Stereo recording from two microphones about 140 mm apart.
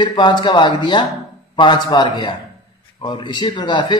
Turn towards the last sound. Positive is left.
turn(degrees=35)  # may be behind; listen again after turning